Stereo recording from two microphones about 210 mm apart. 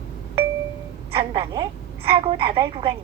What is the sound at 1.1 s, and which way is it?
A woman's voice, 25° right (ahead or behind).